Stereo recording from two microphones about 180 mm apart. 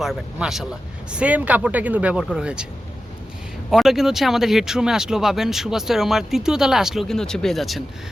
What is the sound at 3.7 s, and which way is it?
Speech, centre (ahead or behind).